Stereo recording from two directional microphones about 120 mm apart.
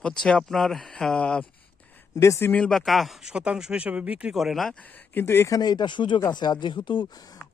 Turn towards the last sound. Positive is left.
turn(degrees=45)  # may be behind; listen again after turning